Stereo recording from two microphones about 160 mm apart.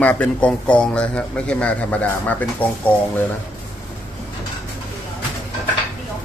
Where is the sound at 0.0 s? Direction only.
10° left (ahead or behind).